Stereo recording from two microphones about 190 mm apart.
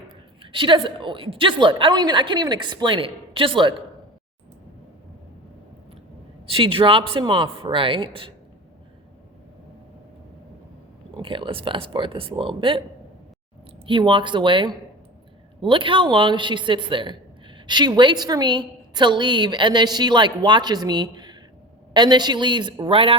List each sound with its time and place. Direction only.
0.5 s a woman's voice: 25° right (ahead or behind)
6.4 s a woman's voice: 30° right (ahead or behind)
11.2 s a woman's voice: 25° right (ahead or behind)
13.8 s a woman's voice: 25° right (ahead or behind)